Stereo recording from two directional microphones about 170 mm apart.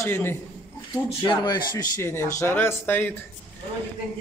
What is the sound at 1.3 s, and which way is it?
Speech, 25° left (ahead or behind).